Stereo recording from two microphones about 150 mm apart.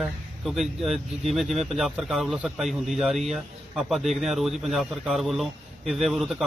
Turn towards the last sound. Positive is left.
turn(degrees=0)  # may be behind; listen again after turning